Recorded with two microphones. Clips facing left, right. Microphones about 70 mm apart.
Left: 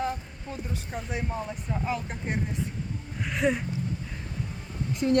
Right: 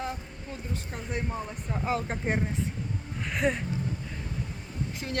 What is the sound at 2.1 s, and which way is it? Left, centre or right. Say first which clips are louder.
Speech: right 3 dB; right.